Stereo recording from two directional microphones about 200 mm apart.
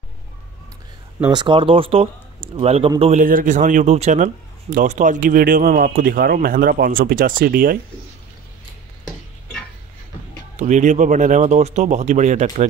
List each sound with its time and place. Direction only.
1.3 s a man's voice: 25° right (ahead or behind); by 7.8 s 45° right (ahead or behind)
10.6 s speech: 35° right (ahead or behind)